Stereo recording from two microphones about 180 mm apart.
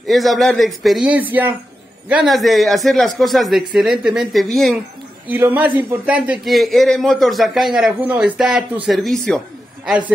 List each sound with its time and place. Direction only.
0.0 s a man's voice: centre (ahead or behind)
5.3 s a man's voice: 10° right (ahead or behind)